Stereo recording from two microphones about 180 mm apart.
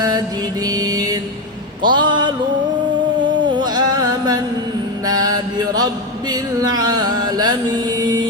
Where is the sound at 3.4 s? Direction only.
25° right (ahead or behind).